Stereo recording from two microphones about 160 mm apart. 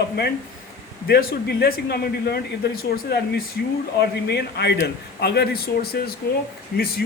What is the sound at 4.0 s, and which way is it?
A man's voice, 90° left.